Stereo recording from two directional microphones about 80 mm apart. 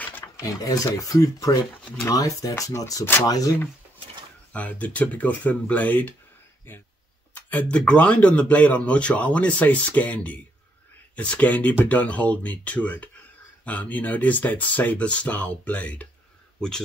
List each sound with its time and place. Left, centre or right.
0.0 s a sound: left
0.4 s speech: left
4.5 s speech: centre